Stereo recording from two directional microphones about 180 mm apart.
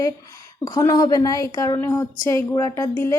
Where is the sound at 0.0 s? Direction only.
20° left (ahead or behind).